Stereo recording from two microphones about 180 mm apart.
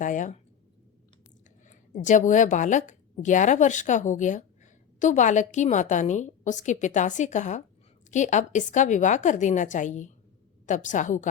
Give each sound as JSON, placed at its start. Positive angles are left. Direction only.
{"t": 0.0, "sound": "a woman's voice", "side_deg": 45}
{"t": 1.6, "sound": "a woman's voice", "side_deg": 45}